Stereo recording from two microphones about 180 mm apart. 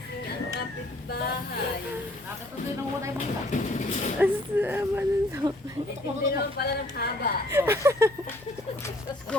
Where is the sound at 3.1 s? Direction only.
40° left (ahead or behind).